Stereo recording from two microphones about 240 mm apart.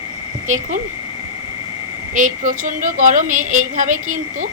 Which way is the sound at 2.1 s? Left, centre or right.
Right.